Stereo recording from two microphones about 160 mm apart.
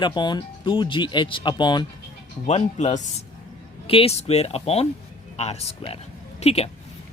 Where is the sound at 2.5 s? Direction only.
45° left (ahead or behind).